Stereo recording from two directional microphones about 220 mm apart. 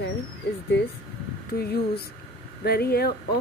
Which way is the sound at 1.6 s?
45° left (ahead or behind).